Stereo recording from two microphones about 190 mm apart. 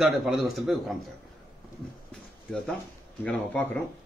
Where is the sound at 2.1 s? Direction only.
5° left (ahead or behind).